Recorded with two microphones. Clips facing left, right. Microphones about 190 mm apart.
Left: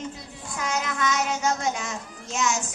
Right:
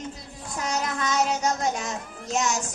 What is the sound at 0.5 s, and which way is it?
Child singing, 40° right (ahead or behind).